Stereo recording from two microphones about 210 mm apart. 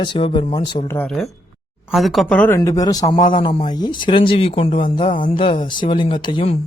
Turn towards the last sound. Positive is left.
turn(degrees=25)  # may be behind; listen again after turning